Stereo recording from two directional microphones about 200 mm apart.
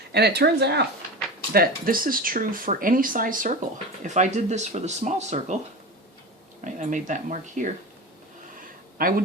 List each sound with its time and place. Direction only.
0.1 s speech: 55° right (ahead or behind); by 5.5 s 35° right (ahead or behind)
6.7 s speech: 40° right (ahead or behind)
9.0 s speech: 45° right (ahead or behind)